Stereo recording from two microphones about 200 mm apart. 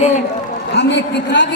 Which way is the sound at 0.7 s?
60° left (ahead or behind).